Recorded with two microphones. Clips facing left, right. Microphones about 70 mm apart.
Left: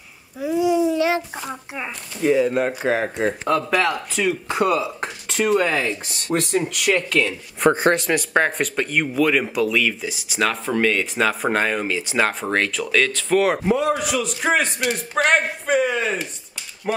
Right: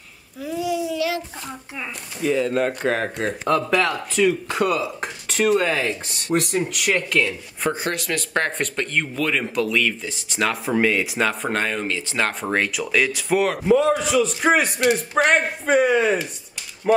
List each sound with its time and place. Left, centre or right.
0.4 s a sound: left
1.4 s speech: left
2.3 s speech: centre
4.5 s speech: centre
7.7 s speech: left
8.1 s speech: centre
11.4 s speech: centre
13.5 s speech: centre